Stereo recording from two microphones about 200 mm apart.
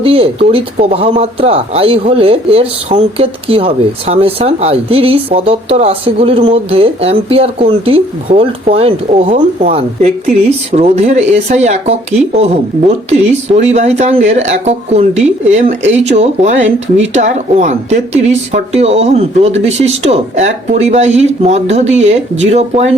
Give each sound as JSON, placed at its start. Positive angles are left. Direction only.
{"t": 0.0, "sound": "speech", "side_deg": -30}